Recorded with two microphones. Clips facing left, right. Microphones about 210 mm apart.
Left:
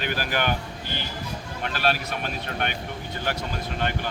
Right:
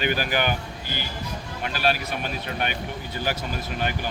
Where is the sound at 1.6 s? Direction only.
5° right (ahead or behind).